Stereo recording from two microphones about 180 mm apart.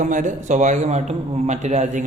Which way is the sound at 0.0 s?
45° right (ahead or behind).